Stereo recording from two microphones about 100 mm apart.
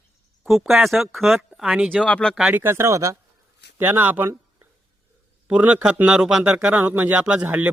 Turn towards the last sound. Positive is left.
turn(degrees=-15)  # may be behind; listen again after turning